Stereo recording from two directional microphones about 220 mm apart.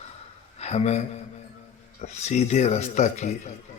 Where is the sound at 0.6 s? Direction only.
30° left (ahead or behind).